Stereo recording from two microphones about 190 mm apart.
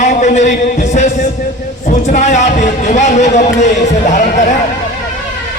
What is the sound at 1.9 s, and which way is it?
A man's voice, 40° left (ahead or behind).